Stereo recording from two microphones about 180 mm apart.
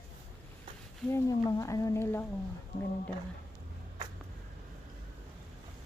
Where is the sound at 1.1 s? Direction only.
20° left (ahead or behind).